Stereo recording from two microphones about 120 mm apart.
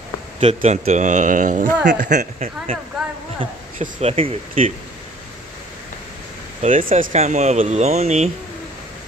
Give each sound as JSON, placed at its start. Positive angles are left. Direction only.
{"t": 0.4, "sound": "speech", "side_deg": -70}
{"t": 3.8, "sound": "speech", "side_deg": -60}
{"t": 6.6, "sound": "speech", "side_deg": -90}